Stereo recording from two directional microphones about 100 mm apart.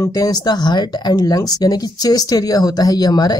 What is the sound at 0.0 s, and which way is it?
Speech, 40° left (ahead or behind).